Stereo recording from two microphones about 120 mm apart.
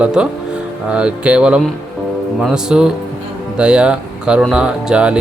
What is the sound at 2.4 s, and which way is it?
Music, 5° right (ahead or behind).